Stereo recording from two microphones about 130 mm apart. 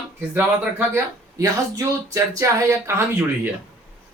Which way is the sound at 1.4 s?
25° right (ahead or behind).